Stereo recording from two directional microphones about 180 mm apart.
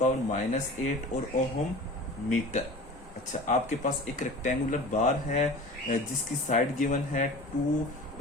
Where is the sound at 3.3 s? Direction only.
40° left (ahead or behind).